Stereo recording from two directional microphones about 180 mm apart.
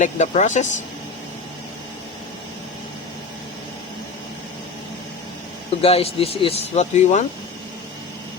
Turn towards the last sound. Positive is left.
turn(degrees=40)  # may be behind; listen again after turning